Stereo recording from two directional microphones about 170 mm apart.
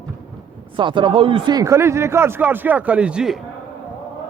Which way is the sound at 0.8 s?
30° right (ahead or behind).